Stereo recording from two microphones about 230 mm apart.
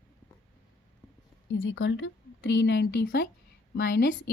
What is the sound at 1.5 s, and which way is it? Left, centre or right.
Speech, left.